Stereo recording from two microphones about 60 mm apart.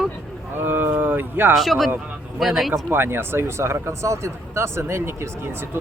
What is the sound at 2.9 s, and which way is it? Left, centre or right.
Speech, right.